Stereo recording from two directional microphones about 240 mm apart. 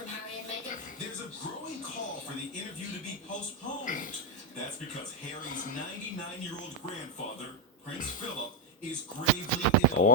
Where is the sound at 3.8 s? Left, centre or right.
Left.